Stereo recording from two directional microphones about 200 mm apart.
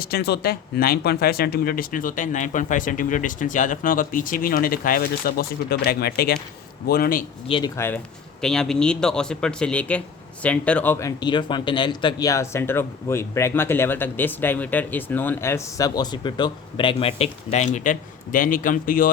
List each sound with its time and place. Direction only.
0.0 s speech: 50° left (ahead or behind)
7.4 s speech: 25° left (ahead or behind)
7.8 s a man's voice: 10° left (ahead or behind); by 19.1 s 45° left (ahead or behind)